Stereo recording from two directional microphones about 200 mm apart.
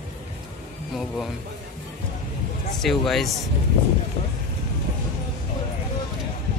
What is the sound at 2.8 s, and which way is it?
Speech, centre (ahead or behind).